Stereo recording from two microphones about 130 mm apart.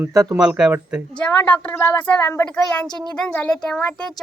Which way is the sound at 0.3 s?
5° right (ahead or behind).